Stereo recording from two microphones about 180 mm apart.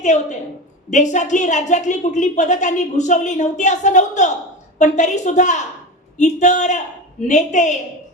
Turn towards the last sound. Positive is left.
turn(degrees=40)  # may be behind; listen again after turning